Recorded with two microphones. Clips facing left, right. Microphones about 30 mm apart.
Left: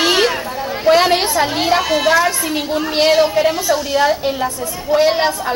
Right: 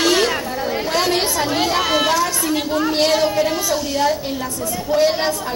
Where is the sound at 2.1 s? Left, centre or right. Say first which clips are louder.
Left 3 dB; left.